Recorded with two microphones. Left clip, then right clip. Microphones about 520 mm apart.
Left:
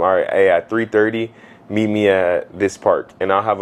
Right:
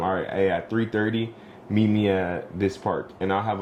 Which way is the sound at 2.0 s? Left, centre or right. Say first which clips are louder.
Left 10 dB; left.